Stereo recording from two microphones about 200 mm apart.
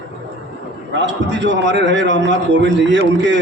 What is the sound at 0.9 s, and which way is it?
A man's voice, 65° right (ahead or behind).